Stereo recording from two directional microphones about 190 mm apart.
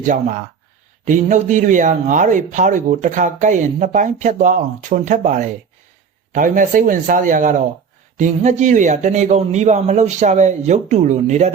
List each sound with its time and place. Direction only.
0.0 s speech: 40° right (ahead or behind)